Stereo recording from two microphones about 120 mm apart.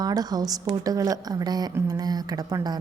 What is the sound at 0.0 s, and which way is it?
A woman's voice, 35° right (ahead or behind).